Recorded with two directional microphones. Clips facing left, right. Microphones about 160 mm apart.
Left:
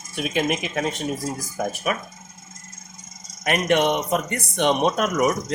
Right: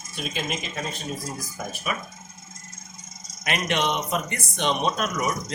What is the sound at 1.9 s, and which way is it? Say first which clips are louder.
Speech: left 4 dB; 60° left (ahead or behind).